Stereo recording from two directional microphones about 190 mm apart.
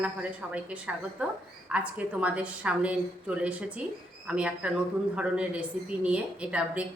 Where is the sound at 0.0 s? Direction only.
5° right (ahead or behind).